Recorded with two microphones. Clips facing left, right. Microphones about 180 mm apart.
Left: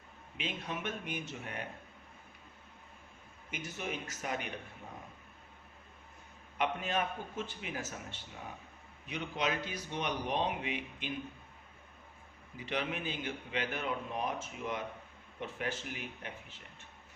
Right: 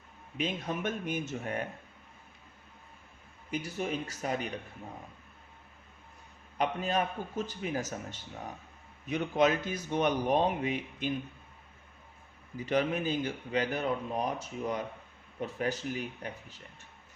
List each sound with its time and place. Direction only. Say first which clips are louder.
0.3 s a man's voice: right 6 dB; 45° right (ahead or behind)
3.5 s speech: right 6 dB; 35° right (ahead or behind)
6.6 s a man's voice: right 4 dB; 35° right (ahead or behind)
12.5 s speech: right 8 dB; 40° right (ahead or behind)